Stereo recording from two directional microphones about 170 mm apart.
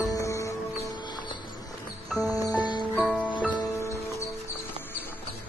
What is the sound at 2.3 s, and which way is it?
Music, 20° left (ahead or behind).